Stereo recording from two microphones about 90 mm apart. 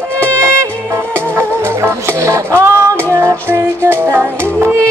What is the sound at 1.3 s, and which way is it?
Music, 30° right (ahead or behind).